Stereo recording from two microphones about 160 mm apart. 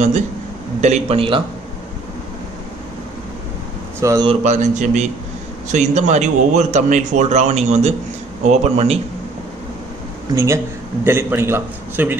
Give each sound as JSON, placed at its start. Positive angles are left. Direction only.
{"t": 0.7, "sound": "a man's voice", "side_deg": -45}
{"t": 4.0, "sound": "speech", "side_deg": -20}
{"t": 4.3, "sound": "a man's voice", "side_deg": -45}
{"t": 10.3, "sound": "a man's voice", "side_deg": -15}